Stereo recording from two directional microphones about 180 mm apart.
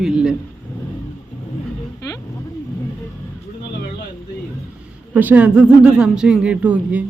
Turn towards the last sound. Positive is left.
turn(degrees=-5)  # may be behind; listen again after turning